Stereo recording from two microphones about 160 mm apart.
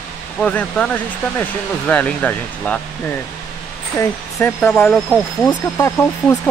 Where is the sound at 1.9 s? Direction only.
10° left (ahead or behind).